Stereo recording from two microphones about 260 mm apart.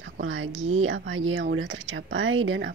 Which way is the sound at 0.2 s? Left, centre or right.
Right.